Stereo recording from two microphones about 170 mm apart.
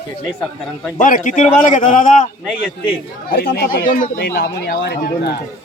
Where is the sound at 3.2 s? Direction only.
65° left (ahead or behind).